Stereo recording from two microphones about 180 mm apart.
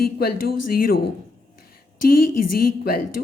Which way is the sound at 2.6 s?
55° left (ahead or behind).